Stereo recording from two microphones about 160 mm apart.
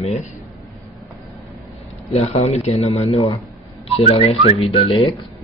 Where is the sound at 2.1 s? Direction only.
40° left (ahead or behind).